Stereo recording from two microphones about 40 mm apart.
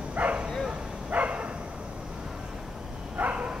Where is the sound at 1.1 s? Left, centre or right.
Right.